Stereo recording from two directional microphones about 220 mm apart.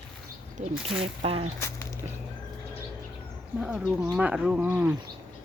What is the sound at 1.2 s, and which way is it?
Speech, 25° right (ahead or behind).